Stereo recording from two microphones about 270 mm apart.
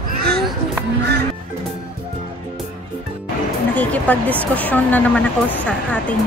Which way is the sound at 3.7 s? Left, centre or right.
Centre.